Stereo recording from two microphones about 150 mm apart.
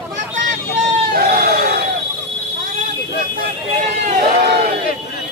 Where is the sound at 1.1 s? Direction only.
90° right.